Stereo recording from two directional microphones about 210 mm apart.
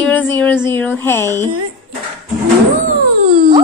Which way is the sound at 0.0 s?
10° left (ahead or behind).